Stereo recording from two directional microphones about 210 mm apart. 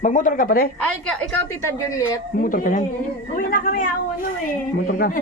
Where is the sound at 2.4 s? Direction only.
40° left (ahead or behind).